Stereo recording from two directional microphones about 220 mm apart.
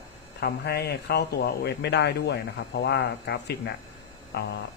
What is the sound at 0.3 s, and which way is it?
Speech, 45° left (ahead or behind).